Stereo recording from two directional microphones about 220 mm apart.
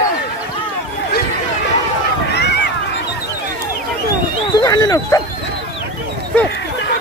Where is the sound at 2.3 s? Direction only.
50° left (ahead or behind).